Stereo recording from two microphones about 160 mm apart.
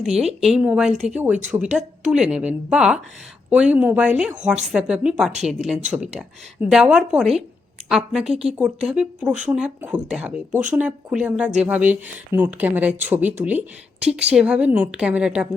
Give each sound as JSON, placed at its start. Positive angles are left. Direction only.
{"t": 0.2, "sound": "a woman's voice", "side_deg": -40}
{"t": 0.5, "sound": "a woman's voice", "side_deg": -5}